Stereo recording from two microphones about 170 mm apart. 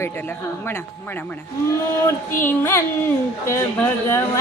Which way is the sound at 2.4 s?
15° left (ahead or behind).